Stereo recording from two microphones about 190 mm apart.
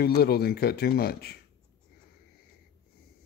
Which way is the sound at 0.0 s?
55° left (ahead or behind).